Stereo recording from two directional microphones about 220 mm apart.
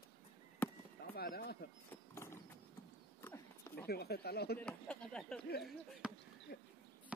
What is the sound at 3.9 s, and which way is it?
Speech, 45° left (ahead or behind).